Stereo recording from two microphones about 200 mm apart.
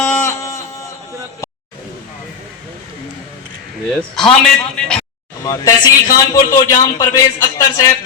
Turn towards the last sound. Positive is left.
turn(degrees=15)  # may be behind; listen again after turning